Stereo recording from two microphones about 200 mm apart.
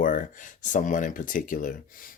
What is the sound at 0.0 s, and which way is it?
Speech, 40° left (ahead or behind).